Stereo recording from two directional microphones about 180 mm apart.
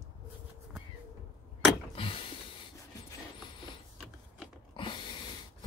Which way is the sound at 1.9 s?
30° left (ahead or behind).